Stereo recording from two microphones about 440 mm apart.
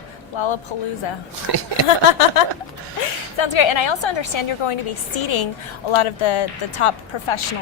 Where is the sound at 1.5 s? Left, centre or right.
Right.